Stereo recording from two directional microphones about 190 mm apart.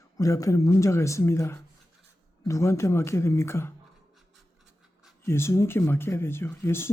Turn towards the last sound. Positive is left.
turn(degrees=15)  # may be behind; listen again after turning